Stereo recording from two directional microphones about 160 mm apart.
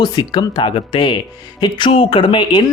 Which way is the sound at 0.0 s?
25° left (ahead or behind).